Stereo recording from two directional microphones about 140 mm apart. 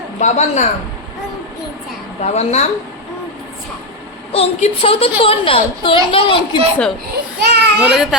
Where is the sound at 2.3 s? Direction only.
50° left (ahead or behind).